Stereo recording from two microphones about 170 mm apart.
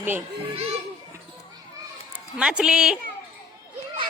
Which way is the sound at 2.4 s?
5° right (ahead or behind).